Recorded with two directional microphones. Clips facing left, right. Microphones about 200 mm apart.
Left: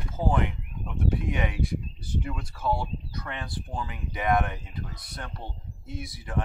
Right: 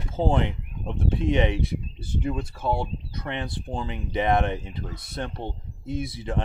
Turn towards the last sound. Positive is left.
turn(degrees=-25)  # may be behind; listen again after turning